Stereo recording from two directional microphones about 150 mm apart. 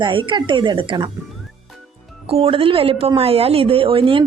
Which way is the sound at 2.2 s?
40° right (ahead or behind).